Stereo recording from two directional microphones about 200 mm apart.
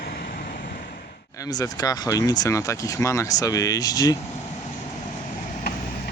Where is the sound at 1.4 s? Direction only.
20° left (ahead or behind).